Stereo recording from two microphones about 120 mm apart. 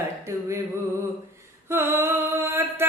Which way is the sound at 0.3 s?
25° right (ahead or behind).